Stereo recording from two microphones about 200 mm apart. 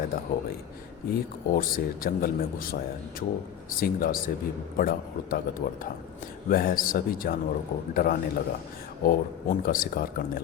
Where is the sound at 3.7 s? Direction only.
45° left (ahead or behind).